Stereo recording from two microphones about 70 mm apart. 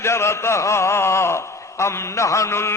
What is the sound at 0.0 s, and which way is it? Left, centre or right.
A man's voice, left.